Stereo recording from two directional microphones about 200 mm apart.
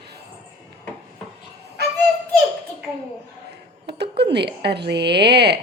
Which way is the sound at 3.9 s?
55° right (ahead or behind).